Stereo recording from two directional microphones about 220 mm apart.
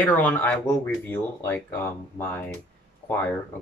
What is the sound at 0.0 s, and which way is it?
Speech, 5° left (ahead or behind).